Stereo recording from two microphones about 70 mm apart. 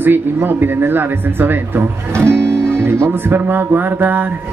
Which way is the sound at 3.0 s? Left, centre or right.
Right.